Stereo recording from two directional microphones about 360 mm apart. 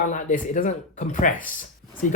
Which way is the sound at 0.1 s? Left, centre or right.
Left.